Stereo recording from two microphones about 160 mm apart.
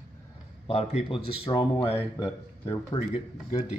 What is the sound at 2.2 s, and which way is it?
Speech, 25° left (ahead or behind).